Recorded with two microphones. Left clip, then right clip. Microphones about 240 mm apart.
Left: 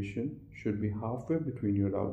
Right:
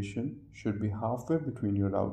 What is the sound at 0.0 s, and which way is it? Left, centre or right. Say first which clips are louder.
Speech: even; right.